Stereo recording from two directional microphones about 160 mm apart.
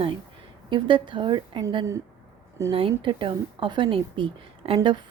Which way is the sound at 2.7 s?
30° right (ahead or behind).